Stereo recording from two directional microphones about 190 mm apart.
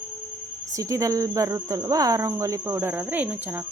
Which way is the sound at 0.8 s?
15° right (ahead or behind).